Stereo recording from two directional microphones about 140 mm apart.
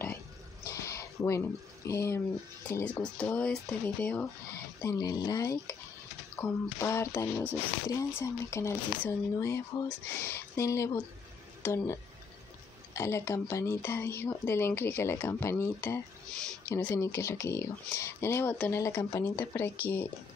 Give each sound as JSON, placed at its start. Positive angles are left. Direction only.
{"t": 0.7, "sound": "a sound", "side_deg": 20}
{"t": 2.7, "sound": "speech", "side_deg": 10}
{"t": 4.8, "sound": "speech", "side_deg": 25}